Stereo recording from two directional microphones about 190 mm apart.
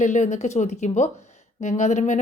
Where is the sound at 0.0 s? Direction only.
40° left (ahead or behind).